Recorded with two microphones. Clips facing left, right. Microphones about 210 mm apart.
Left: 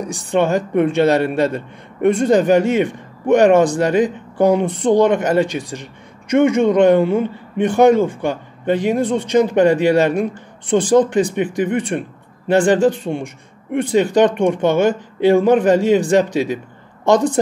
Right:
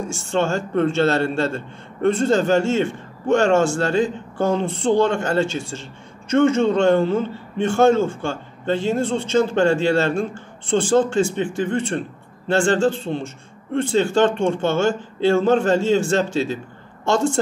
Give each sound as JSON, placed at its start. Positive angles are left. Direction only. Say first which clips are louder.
{"t": 0.0, "sound": "a woman's voice", "louder": "left 4 dB", "side_deg": 15}